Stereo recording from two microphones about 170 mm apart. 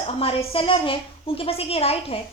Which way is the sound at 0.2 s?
35° left (ahead or behind).